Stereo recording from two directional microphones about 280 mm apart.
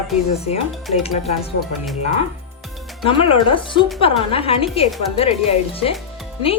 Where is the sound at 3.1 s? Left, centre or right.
Centre.